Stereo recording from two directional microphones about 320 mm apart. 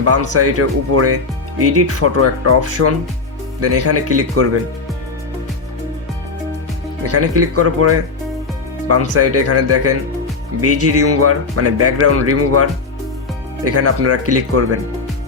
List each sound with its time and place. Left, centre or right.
0.0 s speech: right
7.1 s speech: right
13.7 s speech: right